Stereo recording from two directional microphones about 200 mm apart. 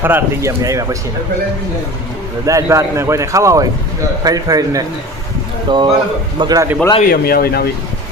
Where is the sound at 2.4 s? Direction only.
15° right (ahead or behind).